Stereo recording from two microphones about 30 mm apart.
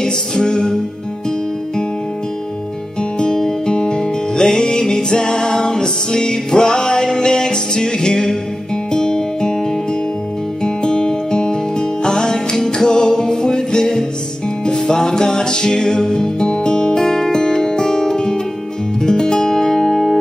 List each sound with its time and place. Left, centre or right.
0.0 s music: left
3.0 s music: left